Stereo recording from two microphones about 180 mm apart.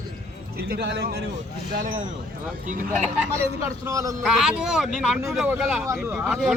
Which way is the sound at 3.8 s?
20° right (ahead or behind).